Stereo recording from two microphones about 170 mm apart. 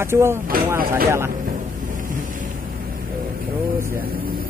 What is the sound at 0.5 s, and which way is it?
Speech, 60° right (ahead or behind).